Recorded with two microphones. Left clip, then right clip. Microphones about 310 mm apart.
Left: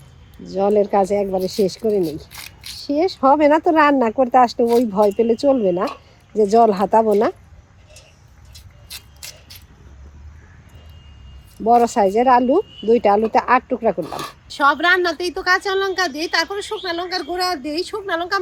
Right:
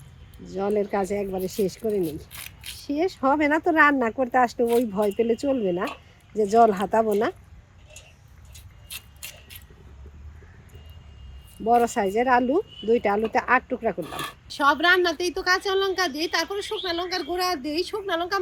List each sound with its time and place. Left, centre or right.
0.4 s speech: left
4.6 s speech: left
11.6 s speech: left
14.1 s speech: centre